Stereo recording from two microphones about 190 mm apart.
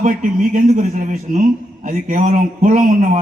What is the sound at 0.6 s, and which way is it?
A man's voice, 40° right (ahead or behind).